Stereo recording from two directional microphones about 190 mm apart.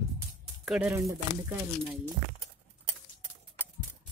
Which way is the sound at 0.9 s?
15° right (ahead or behind).